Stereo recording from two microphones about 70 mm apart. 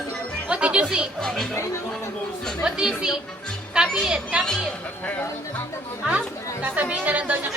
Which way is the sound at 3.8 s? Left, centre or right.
Centre.